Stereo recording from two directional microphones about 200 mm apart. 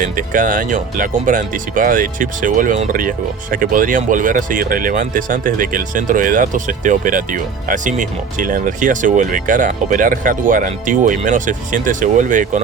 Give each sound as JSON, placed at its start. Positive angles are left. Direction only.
{"t": 0.0, "sound": "speech", "side_deg": -40}